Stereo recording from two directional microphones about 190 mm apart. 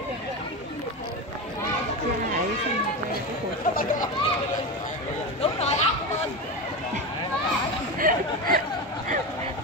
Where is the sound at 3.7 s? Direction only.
50° left (ahead or behind).